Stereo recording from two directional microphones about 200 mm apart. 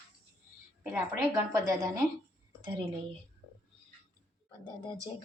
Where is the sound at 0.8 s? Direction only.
15° right (ahead or behind).